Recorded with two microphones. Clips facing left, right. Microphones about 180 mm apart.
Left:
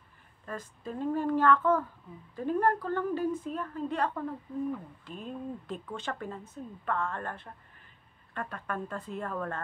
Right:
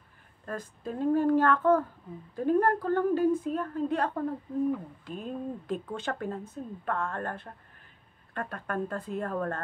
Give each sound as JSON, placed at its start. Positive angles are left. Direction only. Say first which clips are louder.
{"t": 0.5, "sound": "a woman's voice", "louder": "right 3 dB", "side_deg": -50}
{"t": 5.0, "sound": "speech", "louder": "right 4 dB", "side_deg": -5}
{"t": 5.7, "sound": "a woman's voice", "louder": "right 4 dB", "side_deg": -50}